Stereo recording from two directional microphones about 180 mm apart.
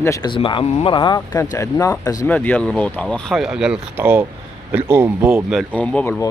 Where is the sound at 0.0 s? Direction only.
20° left (ahead or behind); by 5.8 s centre (ahead or behind).